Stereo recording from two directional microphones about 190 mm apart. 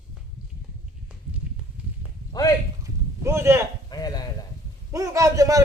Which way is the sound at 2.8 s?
15° right (ahead or behind).